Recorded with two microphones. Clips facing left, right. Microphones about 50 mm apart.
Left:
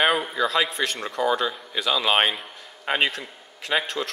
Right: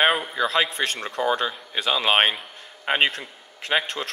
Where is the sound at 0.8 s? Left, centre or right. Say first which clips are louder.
Even; right.